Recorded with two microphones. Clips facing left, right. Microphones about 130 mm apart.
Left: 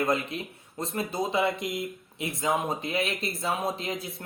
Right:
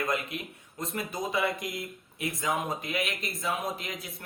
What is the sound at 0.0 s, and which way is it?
Speech, 30° left (ahead or behind).